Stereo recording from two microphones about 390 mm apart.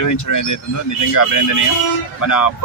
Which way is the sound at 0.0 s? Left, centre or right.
Left.